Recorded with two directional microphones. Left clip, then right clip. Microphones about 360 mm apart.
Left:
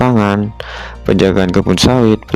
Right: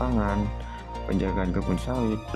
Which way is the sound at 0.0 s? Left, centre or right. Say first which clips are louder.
Left 15 dB; left.